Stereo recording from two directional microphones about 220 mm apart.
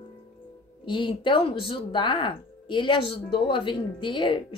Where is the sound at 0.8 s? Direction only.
20° left (ahead or behind).